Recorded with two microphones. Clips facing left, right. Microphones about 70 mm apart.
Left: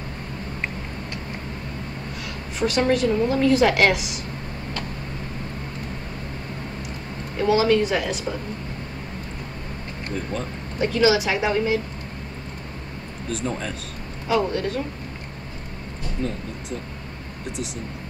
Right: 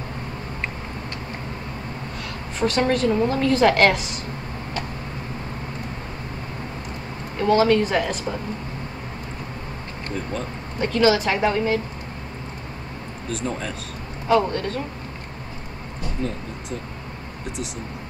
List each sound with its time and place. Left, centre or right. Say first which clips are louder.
2.6 s a woman's voice: even; centre
7.3 s a woman's voice: right 1 dB; centre
10.1 s speech: even; centre
13.3 s a woman's voice: even; centre